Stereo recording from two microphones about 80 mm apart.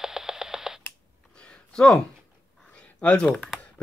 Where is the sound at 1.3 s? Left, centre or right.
Centre.